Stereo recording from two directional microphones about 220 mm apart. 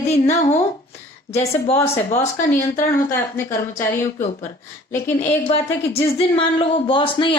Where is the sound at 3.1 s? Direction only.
10° left (ahead or behind).